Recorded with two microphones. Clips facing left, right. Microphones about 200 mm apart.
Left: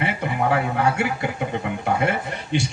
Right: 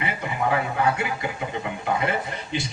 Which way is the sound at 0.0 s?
60° left (ahead or behind).